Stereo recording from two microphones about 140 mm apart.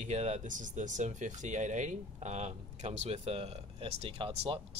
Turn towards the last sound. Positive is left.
turn(degrees=-40)  # may be behind; listen again after turning